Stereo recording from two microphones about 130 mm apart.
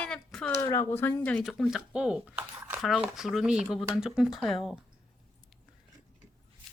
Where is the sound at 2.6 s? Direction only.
20° right (ahead or behind).